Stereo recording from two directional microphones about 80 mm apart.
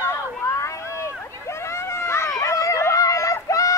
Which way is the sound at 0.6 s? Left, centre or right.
Left.